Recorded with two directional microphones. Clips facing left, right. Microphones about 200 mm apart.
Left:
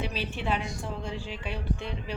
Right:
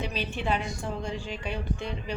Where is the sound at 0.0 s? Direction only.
5° left (ahead or behind).